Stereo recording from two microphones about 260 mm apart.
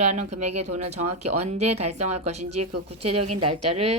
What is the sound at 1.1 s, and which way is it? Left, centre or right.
Speech, right.